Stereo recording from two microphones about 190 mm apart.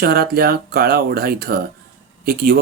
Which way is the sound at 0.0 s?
55° right (ahead or behind).